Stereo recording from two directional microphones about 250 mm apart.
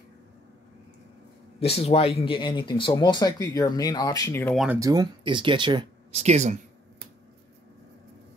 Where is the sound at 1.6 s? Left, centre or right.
Left; by 4.6 s centre.